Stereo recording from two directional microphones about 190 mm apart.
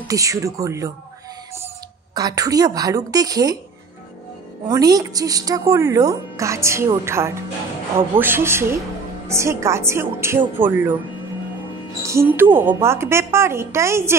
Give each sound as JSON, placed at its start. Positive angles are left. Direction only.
{"t": 0.1, "sound": "speech", "side_deg": -15}
{"t": 2.1, "sound": "a woman's voice", "side_deg": -20}
{"t": 4.6, "sound": "speech", "side_deg": -20}
{"t": 12.0, "sound": "a woman's voice", "side_deg": -15}